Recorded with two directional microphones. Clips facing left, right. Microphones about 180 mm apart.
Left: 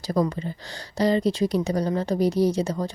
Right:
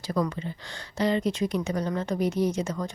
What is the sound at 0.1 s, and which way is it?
Speech, 35° left (ahead or behind).